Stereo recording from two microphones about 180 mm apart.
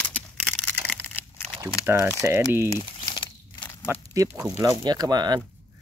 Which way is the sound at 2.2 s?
15° right (ahead or behind).